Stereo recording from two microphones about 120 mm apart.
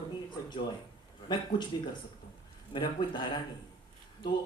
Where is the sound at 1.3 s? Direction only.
40° left (ahead or behind).